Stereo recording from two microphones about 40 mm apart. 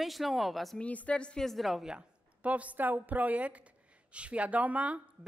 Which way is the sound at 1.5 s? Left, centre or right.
Centre.